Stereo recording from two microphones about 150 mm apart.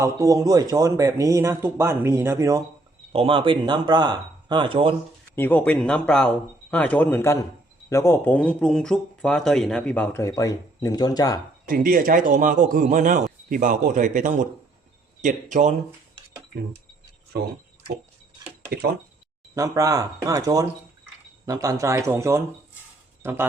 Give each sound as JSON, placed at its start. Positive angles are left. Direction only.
{"t": 0.0, "sound": "speech", "side_deg": -20}
{"t": 3.1, "sound": "speech", "side_deg": -40}
{"t": 5.4, "sound": "speech", "side_deg": 10}
{"t": 11.6, "sound": "speech", "side_deg": -70}
{"t": 19.5, "sound": "speech", "side_deg": -20}